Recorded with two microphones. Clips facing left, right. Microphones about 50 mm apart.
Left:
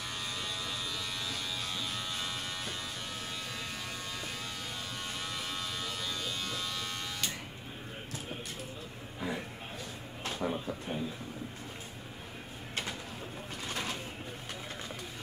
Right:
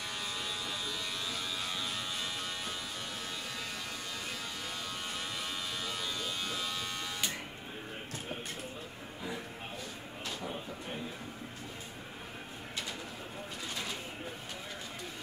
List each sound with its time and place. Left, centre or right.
0.2 s electric shaver: centre
5.2 s electric shaver: centre
10.2 s a sound: left